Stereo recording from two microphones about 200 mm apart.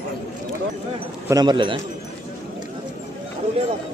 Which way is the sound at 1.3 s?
20° right (ahead or behind).